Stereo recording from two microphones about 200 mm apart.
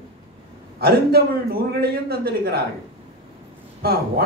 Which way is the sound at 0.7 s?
50° right (ahead or behind).